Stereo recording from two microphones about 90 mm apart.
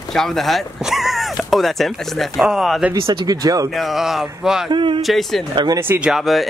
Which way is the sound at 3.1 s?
50° right (ahead or behind).